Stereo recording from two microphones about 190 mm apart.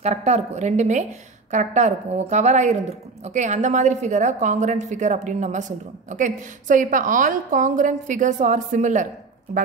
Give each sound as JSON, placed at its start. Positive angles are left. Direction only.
{"t": 0.0, "sound": "a woman's voice", "side_deg": -35}